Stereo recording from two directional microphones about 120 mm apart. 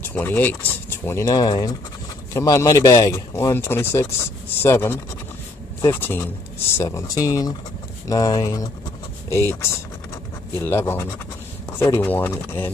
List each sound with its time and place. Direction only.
0.0 s speech: 15° left (ahead or behind)